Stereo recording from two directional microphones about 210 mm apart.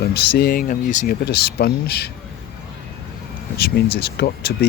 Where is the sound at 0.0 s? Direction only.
50° left (ahead or behind).